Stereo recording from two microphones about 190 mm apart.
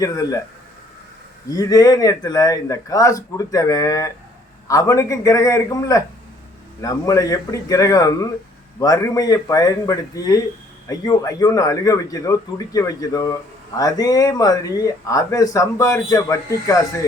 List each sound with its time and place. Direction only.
0.0 s speech: 20° left (ahead or behind)
1.5 s speech: 20° left (ahead or behind)